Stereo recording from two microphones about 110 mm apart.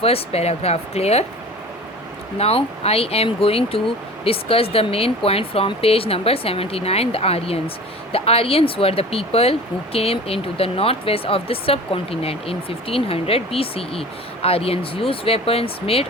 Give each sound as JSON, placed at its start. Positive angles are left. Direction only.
{"t": 0.0, "sound": "speech", "side_deg": 65}
{"t": 2.4, "sound": "speech", "side_deg": 65}